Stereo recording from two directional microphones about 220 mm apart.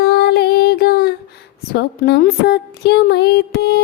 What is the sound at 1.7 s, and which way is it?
Speech, 45° left (ahead or behind).